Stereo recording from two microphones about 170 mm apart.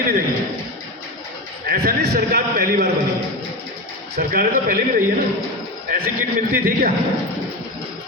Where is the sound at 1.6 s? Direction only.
65° right (ahead or behind).